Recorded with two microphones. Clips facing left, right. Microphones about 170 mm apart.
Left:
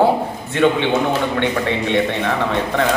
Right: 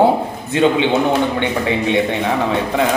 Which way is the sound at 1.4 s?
15° right (ahead or behind).